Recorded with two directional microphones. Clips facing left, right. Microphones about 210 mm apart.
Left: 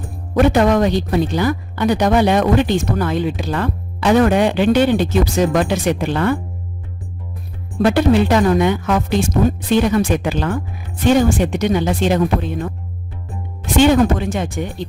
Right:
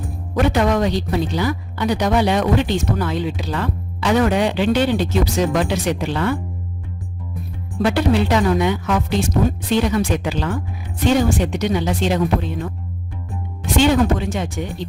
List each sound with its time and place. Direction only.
0.5 s speech: 50° left (ahead or behind)
7.8 s speech: 50° left (ahead or behind)
13.7 s speech: 50° left (ahead or behind)